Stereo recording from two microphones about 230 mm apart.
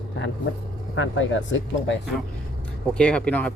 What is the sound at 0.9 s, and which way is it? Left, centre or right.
Speech, left.